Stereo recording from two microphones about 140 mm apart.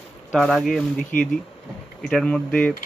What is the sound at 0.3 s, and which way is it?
Speech, centre (ahead or behind).